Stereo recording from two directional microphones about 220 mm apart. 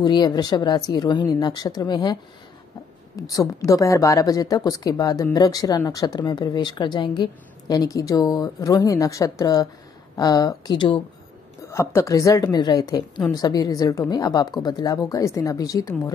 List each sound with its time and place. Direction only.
0.0 s a woman's voice: 20° left (ahead or behind)
3.3 s speech: 15° left (ahead or behind)